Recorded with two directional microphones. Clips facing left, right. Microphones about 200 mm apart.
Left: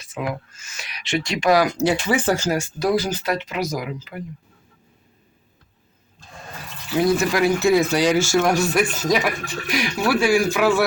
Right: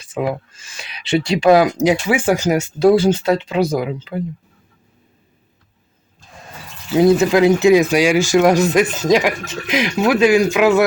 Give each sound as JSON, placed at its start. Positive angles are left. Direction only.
{"t": 0.0, "sound": "speech", "side_deg": -30}
{"t": 6.9, "sound": "speech", "side_deg": -25}